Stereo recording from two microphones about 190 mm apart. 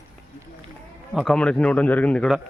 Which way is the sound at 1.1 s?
Centre (ahead or behind).